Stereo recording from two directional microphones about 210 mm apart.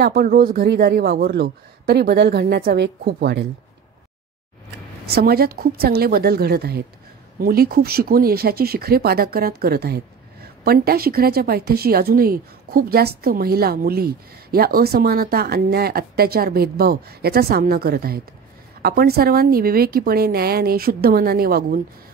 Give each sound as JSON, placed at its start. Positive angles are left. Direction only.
{"t": 0.0, "sound": "a woman's voice", "side_deg": -50}
{"t": 5.0, "sound": "a woman's voice", "side_deg": -45}